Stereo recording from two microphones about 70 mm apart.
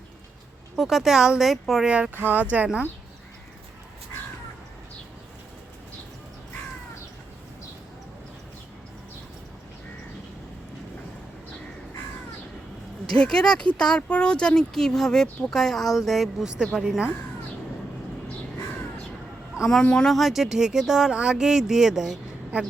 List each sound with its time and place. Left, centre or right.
0.8 s speech: centre
1.9 s speech: centre
13.1 s speech: centre
19.6 s speech: centre
20.1 s speech: centre